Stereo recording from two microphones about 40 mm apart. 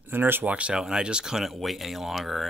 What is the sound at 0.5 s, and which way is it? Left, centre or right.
Speech, right.